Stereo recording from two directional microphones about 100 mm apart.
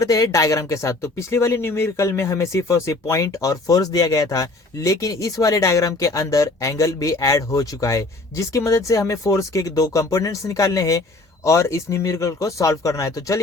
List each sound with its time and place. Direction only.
0.0 s speech: 35° left (ahead or behind)